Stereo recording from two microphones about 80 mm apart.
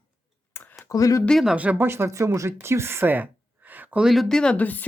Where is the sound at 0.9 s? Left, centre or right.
Left.